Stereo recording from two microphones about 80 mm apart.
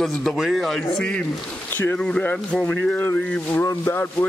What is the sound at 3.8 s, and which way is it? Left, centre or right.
Speech, left.